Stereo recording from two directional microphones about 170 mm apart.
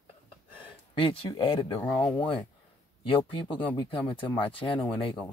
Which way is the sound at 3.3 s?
30° left (ahead or behind).